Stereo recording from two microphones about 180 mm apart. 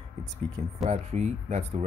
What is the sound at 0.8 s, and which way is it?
Speech, 40° right (ahead or behind).